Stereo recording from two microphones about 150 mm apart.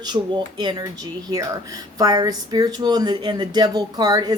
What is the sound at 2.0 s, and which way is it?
Speech, 25° right (ahead or behind).